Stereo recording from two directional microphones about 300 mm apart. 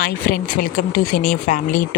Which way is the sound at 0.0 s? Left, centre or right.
Left.